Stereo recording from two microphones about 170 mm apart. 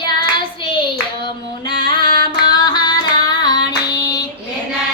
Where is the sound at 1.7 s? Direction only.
25° left (ahead or behind).